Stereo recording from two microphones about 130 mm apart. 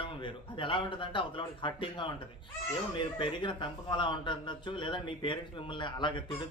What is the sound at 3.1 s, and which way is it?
A man's voice, 40° left (ahead or behind).